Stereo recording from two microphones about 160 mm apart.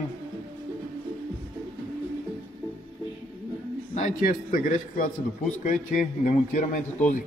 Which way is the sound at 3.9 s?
60° left (ahead or behind).